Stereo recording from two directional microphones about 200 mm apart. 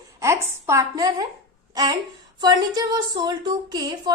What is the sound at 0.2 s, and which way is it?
A woman's voice, 15° right (ahead or behind).